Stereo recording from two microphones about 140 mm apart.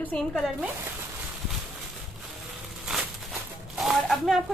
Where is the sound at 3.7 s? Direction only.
Centre (ahead or behind).